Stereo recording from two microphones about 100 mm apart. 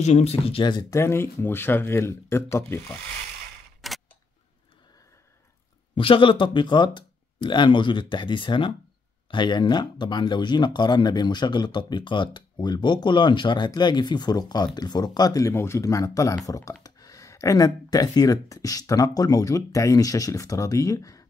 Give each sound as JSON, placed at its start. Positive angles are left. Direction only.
{"t": 0.1, "sound": "speech", "side_deg": 90}
{"t": 0.8, "sound": "speech", "side_deg": 30}
{"t": 3.8, "sound": "camera", "side_deg": 0}
{"t": 5.9, "sound": "speech", "side_deg": 60}